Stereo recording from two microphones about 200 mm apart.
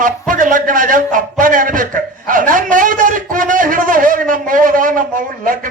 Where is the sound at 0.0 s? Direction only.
40° right (ahead or behind).